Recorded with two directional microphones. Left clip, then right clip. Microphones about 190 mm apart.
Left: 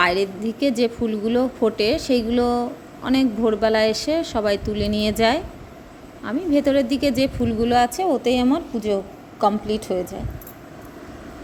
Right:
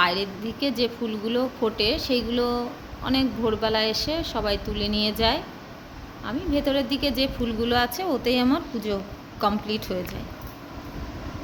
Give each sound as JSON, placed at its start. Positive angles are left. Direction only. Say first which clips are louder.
{"t": 0.0, "sound": "a woman's voice", "louder": "left 4 dB", "side_deg": 35}